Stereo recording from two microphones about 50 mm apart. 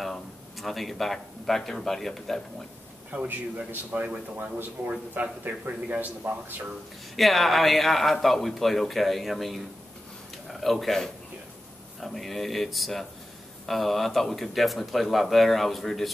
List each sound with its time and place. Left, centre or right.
0.0 s speech: centre
3.1 s speech: right
4.8 s speech: right
5.1 s speech: right
7.2 s a man's voice: centre